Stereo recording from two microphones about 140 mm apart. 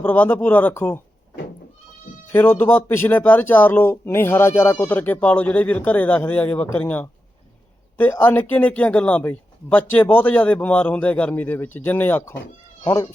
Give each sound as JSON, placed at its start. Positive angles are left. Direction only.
{"t": 0.0, "sound": "speech", "side_deg": 15}
{"t": 2.3, "sound": "speech", "side_deg": 15}